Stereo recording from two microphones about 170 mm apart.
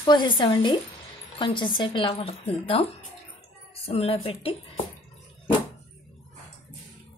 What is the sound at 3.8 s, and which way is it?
Speech, 35° left (ahead or behind).